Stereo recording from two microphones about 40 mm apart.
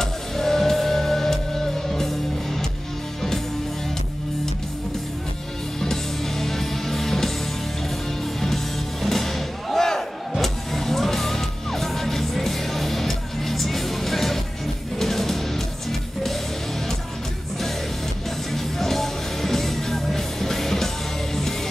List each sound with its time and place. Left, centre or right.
0.0 s music: centre
5.8 s music: centre
9.0 s music: centre
18.5 s music: centre